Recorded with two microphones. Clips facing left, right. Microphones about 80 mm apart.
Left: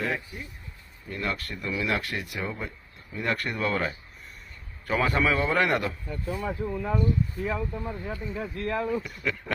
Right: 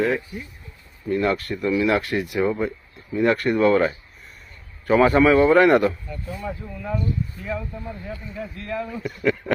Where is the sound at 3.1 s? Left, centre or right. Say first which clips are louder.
Right 10 dB; centre.